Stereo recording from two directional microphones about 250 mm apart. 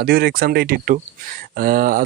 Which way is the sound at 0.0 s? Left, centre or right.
Right.